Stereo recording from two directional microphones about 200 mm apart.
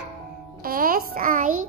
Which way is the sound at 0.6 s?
45° right (ahead or behind).